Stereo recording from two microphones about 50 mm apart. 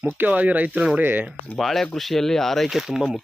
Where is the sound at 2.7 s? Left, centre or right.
Centre.